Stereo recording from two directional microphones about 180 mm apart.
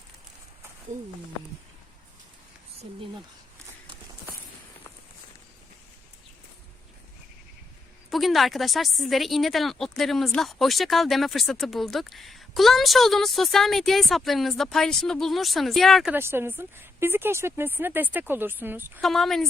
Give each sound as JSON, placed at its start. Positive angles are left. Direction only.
{"t": 8.1, "sound": "speech", "side_deg": 0}
{"t": 16.1, "sound": "speech", "side_deg": -10}
{"t": 19.0, "sound": "speech", "side_deg": 0}